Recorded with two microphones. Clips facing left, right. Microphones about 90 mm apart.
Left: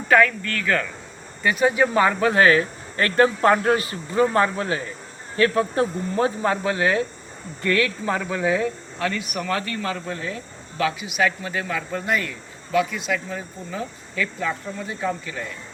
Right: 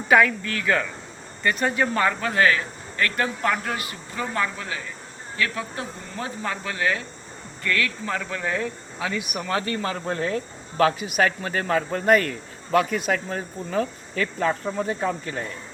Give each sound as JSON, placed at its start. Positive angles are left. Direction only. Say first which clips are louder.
{"t": 0.1, "sound": "speech", "louder": "left 1 dB", "side_deg": -10}
{"t": 1.4, "sound": "speech", "louder": "left 4 dB", "side_deg": 5}
{"t": 8.2, "sound": "speech", "louder": "left 5 dB", "side_deg": 10}
{"t": 9.0, "sound": "speech", "louder": "left 1 dB", "side_deg": -15}